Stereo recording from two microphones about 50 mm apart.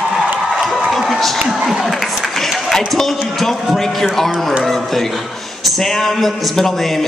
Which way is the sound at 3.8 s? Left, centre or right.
Centre.